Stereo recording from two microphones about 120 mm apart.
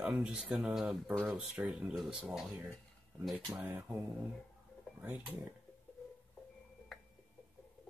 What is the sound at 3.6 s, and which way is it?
Speech, 15° right (ahead or behind).